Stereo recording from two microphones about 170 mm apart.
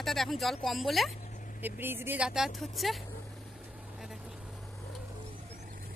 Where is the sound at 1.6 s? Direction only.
10° right (ahead or behind).